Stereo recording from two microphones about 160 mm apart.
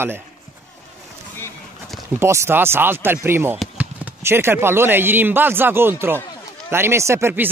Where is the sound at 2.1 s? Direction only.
15° right (ahead or behind).